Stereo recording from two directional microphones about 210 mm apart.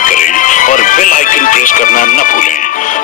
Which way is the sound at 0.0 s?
40° left (ahead or behind).